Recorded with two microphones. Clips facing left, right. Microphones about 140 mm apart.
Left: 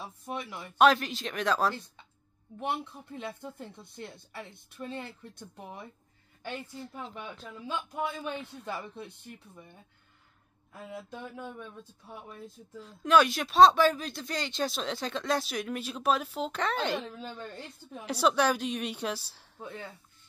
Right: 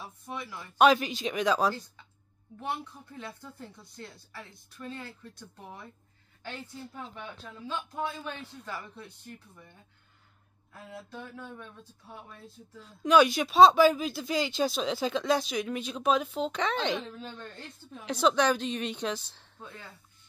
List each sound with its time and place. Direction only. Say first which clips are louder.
0.0 s speech: left 2 dB; 20° left (ahead or behind)
0.7 s speech: right 1 dB; centre (ahead or behind)
2.6 s speech: left 2 dB; 20° left (ahead or behind)
7.2 s speech: left 1 dB; 15° left (ahead or behind)
10.7 s speech: left 2 dB; 15° left (ahead or behind)
12.8 s speech: right 2 dB; centre (ahead or behind)